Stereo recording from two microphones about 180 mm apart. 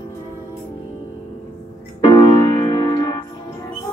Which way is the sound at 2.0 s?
25° left (ahead or behind).